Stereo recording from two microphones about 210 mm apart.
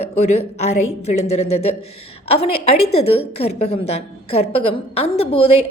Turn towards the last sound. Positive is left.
turn(degrees=25)  # may be behind; listen again after turning